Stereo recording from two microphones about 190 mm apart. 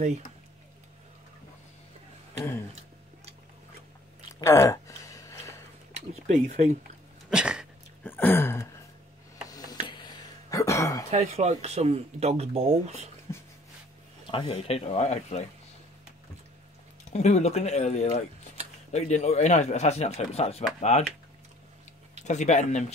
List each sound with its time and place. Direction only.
4.4 s a sound: 15° left (ahead or behind)
5.9 s speech: 35° right (ahead or behind)
7.2 s dog: 5° right (ahead or behind)
8.0 s a sound: 10° left (ahead or behind)
11.1 s speech: 35° right (ahead or behind)
13.3 s a sound: 15° left (ahead or behind)
14.3 s speech: 30° left (ahead or behind)
17.1 s speech: 35° left (ahead or behind)
22.2 s speech: 35° left (ahead or behind)